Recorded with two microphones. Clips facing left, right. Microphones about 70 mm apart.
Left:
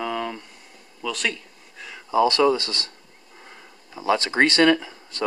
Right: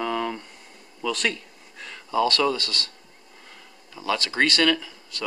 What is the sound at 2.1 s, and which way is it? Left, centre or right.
Speech, centre.